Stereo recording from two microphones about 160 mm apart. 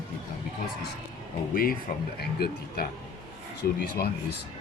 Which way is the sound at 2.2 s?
75° left (ahead or behind).